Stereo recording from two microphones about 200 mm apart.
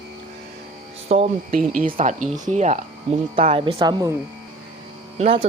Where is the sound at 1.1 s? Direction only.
30° right (ahead or behind).